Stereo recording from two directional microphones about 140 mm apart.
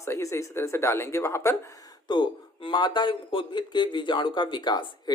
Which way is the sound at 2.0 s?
35° left (ahead or behind).